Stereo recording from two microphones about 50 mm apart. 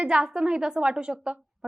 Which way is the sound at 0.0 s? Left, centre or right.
Centre.